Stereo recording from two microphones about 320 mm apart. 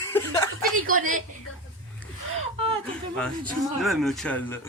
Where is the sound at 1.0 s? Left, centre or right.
Right.